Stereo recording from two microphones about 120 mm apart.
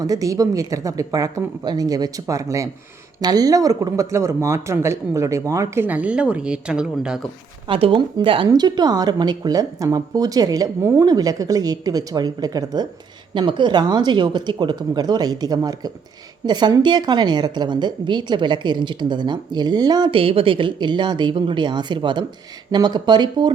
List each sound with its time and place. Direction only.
0.0 s speech: 30° right (ahead or behind); by 7.2 s 5° right (ahead or behind)
7.7 s speech: 50° right (ahead or behind)
8.4 s a woman's voice: 35° right (ahead or behind)
20.1 s a woman's voice: 50° right (ahead or behind)